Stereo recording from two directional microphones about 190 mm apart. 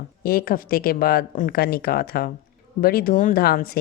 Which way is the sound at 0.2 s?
55° left (ahead or behind).